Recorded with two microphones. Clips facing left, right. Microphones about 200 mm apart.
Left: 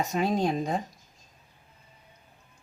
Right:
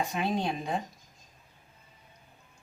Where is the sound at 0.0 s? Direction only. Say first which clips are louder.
Left 4 dB; 45° left (ahead or behind).